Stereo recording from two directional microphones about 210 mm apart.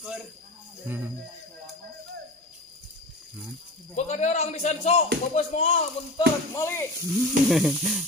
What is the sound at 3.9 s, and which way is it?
A man's voice, 35° left (ahead or behind).